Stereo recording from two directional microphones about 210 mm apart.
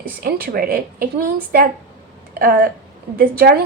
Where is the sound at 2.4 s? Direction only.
45° right (ahead or behind).